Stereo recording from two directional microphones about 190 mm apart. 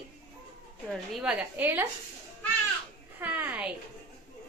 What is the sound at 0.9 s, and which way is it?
Speech, 5° right (ahead or behind).